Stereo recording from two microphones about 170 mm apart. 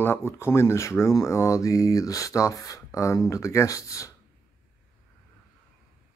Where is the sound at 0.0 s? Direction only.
15° left (ahead or behind).